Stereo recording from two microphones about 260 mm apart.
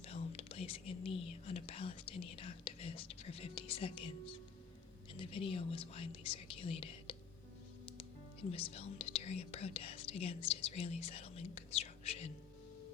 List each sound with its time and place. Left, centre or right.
0.0 s speech: left
8.4 s speech: left